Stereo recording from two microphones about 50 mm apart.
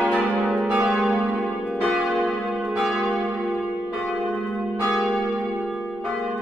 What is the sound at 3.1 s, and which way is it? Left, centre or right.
Church bell, right.